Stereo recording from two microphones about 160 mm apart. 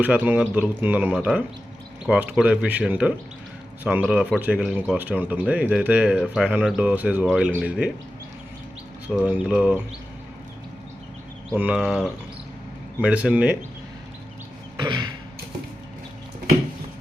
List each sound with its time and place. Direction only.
0.0 s speech: 10° right (ahead or behind)
9.2 s speech: 5° right (ahead or behind)
11.5 s speech: 10° right (ahead or behind)
14.8 s a sound: 25° right (ahead or behind)